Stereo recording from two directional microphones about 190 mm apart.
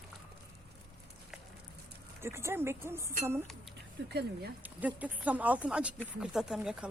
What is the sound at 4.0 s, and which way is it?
Speech, 60° right (ahead or behind).